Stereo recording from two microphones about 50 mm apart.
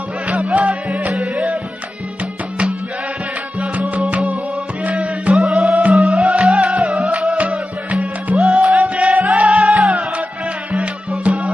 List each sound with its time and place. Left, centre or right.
0.3 s music: right
3.7 s music: right
5.2 s music: centre